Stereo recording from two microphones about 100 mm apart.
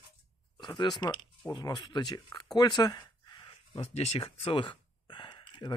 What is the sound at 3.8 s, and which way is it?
Speech, 90° left.